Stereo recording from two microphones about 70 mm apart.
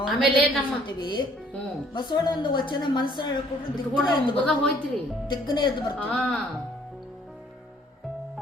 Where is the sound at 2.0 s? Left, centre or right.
Left.